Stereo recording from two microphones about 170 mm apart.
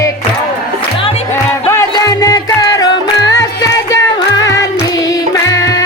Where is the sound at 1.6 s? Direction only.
15° left (ahead or behind).